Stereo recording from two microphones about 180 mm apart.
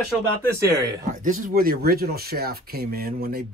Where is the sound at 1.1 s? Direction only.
45° right (ahead or behind).